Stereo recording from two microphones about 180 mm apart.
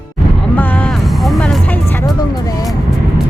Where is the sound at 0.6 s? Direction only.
10° left (ahead or behind).